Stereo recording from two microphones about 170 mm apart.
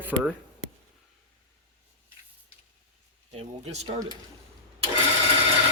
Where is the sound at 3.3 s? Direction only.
40° right (ahead or behind).